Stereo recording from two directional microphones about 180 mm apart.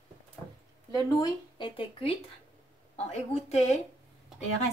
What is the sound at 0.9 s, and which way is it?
Speech, 20° left (ahead or behind).